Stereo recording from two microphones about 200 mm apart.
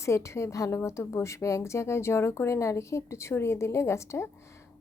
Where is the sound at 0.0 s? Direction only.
15° left (ahead or behind).